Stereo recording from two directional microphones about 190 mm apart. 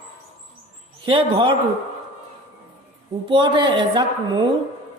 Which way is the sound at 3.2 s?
25° right (ahead or behind).